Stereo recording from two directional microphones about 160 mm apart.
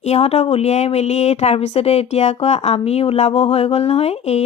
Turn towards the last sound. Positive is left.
turn(degrees=40)  # may be behind; listen again after turning